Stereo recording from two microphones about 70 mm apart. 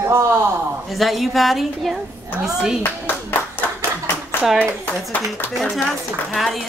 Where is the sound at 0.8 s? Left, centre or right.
Centre.